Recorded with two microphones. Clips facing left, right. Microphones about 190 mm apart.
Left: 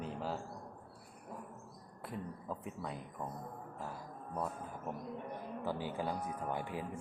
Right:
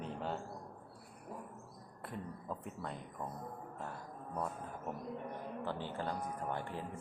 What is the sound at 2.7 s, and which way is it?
Speech, 5° left (ahead or behind).